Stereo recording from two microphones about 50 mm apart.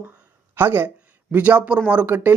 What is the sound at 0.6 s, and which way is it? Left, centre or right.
A man's voice, right.